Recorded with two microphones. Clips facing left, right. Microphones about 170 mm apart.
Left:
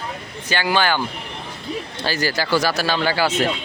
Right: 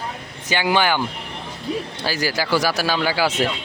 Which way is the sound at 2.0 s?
10° right (ahead or behind).